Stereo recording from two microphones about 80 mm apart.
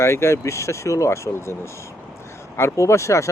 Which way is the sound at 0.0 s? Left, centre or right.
Left.